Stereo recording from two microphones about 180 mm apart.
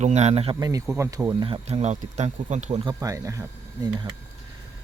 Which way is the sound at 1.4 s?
35° right (ahead or behind).